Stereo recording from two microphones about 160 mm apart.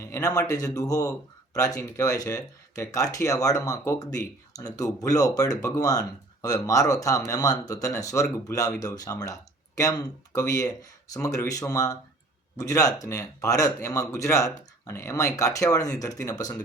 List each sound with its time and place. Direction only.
0.0 s speech: 20° left (ahead or behind)